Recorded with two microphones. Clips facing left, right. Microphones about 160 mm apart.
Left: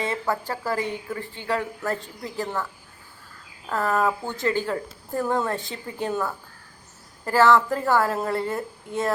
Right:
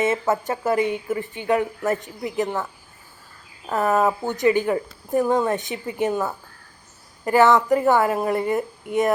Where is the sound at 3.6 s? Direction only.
20° right (ahead or behind).